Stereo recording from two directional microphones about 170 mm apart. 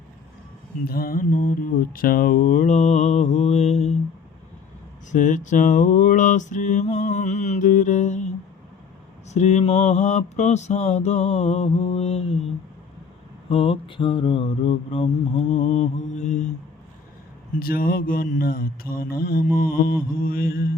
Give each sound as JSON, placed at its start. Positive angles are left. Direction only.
{"t": 0.9, "sound": "mantra", "side_deg": 60}
{"t": 5.1, "sound": "mantra", "side_deg": 45}
{"t": 9.3, "sound": "mantra", "side_deg": 40}
{"t": 13.5, "sound": "mantra", "side_deg": 35}
{"t": 17.6, "sound": "mantra", "side_deg": 60}